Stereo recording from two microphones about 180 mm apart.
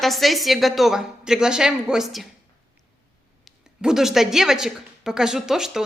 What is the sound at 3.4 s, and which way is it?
A woman's voice, 5° right (ahead or behind).